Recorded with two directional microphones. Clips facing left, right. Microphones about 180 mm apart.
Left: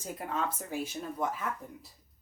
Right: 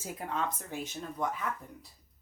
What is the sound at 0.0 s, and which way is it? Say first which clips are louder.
Speech: left 1 dB; centre (ahead or behind).